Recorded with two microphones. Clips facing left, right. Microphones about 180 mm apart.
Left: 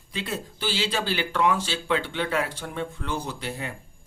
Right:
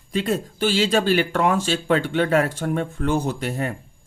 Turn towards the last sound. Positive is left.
turn(degrees=-50)  # may be behind; listen again after turning